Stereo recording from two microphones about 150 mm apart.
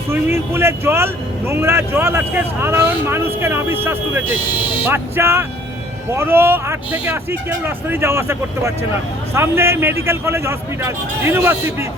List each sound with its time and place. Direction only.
0.1 s speech: 15° right (ahead or behind)